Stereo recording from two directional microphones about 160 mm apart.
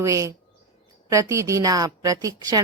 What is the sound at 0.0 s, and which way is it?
A woman's voice, 20° right (ahead or behind).